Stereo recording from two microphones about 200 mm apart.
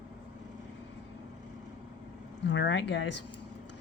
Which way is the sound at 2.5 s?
65° left (ahead or behind).